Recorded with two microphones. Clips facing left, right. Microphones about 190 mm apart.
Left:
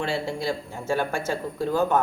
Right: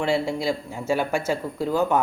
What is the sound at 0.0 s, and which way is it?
Speech, 10° right (ahead or behind).